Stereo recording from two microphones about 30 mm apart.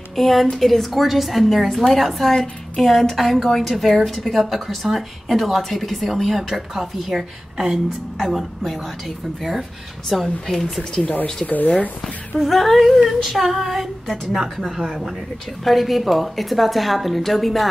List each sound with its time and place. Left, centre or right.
0.1 s a woman's voice: centre
10.0 s a woman's voice: centre
11.4 s speech: left
12.4 s a woman's voice: centre
15.6 s a woman's voice: centre